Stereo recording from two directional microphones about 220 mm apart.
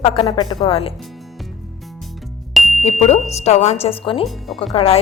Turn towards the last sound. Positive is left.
turn(degrees=25)  # may be behind; listen again after turning